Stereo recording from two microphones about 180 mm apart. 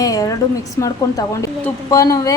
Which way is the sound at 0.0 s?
20° left (ahead or behind).